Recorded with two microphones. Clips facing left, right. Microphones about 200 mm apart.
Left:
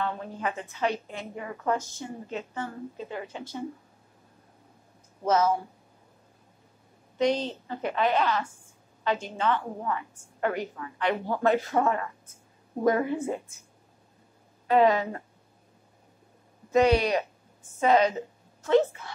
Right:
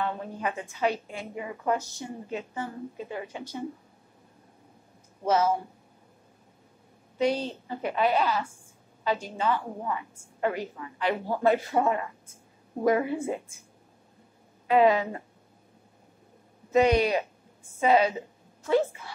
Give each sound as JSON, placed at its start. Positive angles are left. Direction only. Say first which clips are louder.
{"t": 0.0, "sound": "a woman's voice", "louder": "even", "side_deg": -15}
{"t": 5.2, "sound": "a woman's voice", "louder": "even", "side_deg": -10}
{"t": 7.2, "sound": "a woman's voice", "louder": "left 1 dB", "side_deg": -10}
{"t": 11.1, "sound": "a woman's voice", "louder": "even", "side_deg": -10}
{"t": 14.7, "sound": "a woman's voice", "louder": "even", "side_deg": -15}
{"t": 16.7, "sound": "a woman's voice", "louder": "even", "side_deg": -15}